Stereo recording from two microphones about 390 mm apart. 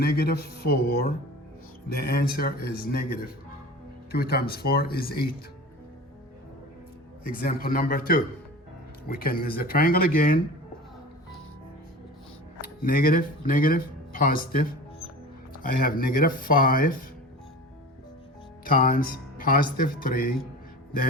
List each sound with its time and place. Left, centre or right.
0.0 s speech: left
7.3 s speech: left
12.8 s speech: left
18.6 s speech: left